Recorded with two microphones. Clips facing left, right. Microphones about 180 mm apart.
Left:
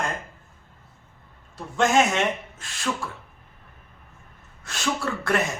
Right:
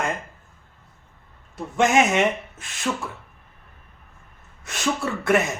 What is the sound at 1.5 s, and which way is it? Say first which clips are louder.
Speech: right 2 dB; 20° right (ahead or behind).